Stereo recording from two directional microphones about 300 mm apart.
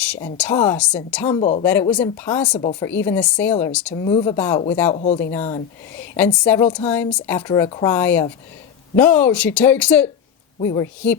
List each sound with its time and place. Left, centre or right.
0.0 s a sound: centre
0.3 s speech: centre
1.4 s speech: centre
1.6 s speech: centre
2.6 s speech: centre
2.9 s speech: centre
3.9 s speech: centre
4.9 s speech: left